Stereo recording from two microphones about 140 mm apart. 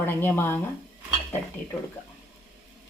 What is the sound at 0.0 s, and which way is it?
Speech, 15° left (ahead or behind).